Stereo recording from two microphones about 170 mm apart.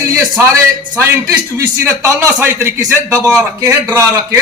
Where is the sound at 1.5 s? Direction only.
15° right (ahead or behind).